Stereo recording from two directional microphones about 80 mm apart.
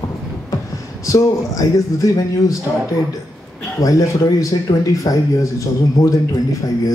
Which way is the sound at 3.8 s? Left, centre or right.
Left.